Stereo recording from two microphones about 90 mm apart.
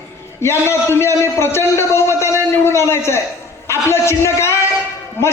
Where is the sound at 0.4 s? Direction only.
30° left (ahead or behind).